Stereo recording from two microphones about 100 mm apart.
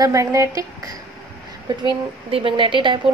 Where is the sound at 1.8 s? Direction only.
60° right (ahead or behind).